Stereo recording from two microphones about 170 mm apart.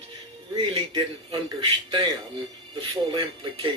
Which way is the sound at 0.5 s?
30° right (ahead or behind).